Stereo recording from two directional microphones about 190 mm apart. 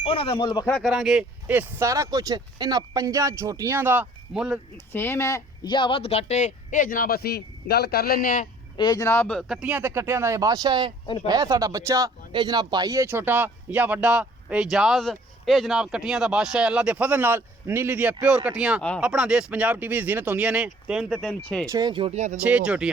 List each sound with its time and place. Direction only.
0.0 s speech: 30° left (ahead or behind)
0.7 s speech: centre (ahead or behind)
4.9 s speech: 10° left (ahead or behind); by 8.4 s 45° left (ahead or behind)
8.8 s speech: 20° left (ahead or behind); by 10.9 s 25° right (ahead or behind)
11.0 s speech: 25° left (ahead or behind)
11.3 s speech: 20° right (ahead or behind); by 21.3 s centre (ahead or behind)
21.7 s speech: 20° right (ahead or behind)
22.4 s speech: 5° right (ahead or behind)